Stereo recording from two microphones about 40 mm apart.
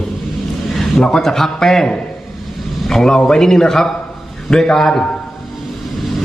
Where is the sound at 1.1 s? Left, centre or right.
Centre.